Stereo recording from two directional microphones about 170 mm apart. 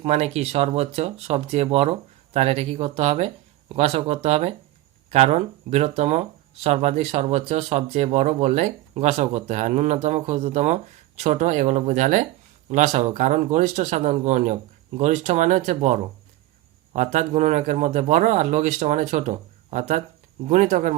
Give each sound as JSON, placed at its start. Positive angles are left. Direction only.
{"t": 0.0, "sound": "a man's voice", "side_deg": -40}